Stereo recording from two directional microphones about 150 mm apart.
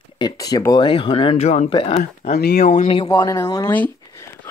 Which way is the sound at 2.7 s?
40° left (ahead or behind).